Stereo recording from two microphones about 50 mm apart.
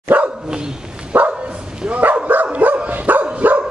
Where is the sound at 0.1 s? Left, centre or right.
Right.